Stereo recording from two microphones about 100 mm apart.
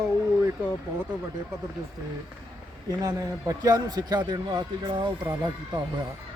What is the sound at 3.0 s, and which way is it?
A man's voice, 40° right (ahead or behind).